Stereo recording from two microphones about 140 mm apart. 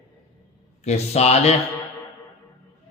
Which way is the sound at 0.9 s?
50° left (ahead or behind).